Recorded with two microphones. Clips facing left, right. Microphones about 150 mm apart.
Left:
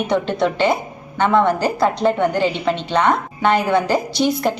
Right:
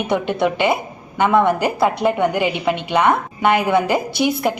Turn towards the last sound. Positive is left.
turn(degrees=-10)  # may be behind; listen again after turning